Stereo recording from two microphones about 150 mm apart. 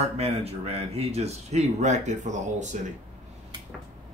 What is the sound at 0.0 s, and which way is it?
Speech, 45° right (ahead or behind).